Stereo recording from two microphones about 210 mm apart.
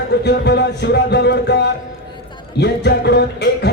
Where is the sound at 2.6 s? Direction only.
55° left (ahead or behind).